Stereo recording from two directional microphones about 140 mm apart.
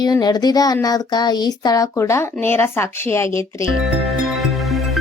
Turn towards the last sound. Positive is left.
turn(degrees=15)  # may be behind; listen again after turning